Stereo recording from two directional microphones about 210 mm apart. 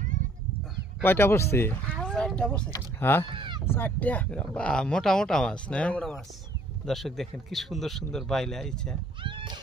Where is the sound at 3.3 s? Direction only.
20° right (ahead or behind).